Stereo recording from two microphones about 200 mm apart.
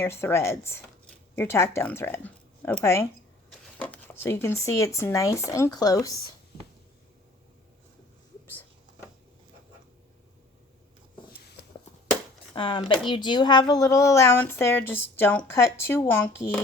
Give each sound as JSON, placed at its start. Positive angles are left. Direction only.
{"t": 0.0, "sound": "speech", "side_deg": 10}
{"t": 12.5, "sound": "speech", "side_deg": 25}